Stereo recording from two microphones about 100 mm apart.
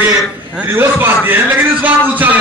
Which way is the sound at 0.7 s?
20° right (ahead or behind).